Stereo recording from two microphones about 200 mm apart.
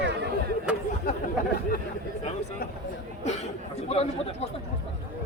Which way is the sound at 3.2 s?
35° left (ahead or behind).